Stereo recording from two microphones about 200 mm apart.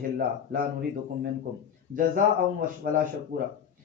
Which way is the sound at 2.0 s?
45° right (ahead or behind).